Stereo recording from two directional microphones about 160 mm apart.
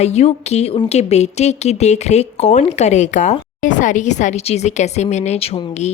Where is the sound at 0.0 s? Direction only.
40° left (ahead or behind).